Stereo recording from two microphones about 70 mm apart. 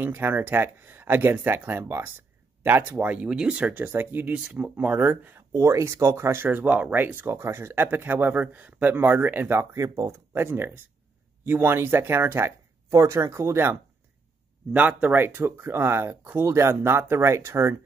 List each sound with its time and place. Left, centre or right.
0.0 s speech: right
3.2 s speech: centre
3.8 s speech: right
4.3 s speech: centre
4.7 s speech: right
5.6 s speech: right
9.8 s speech: right
10.3 s speech: right
12.9 s speech: right
14.7 s speech: right
15.1 s speech: right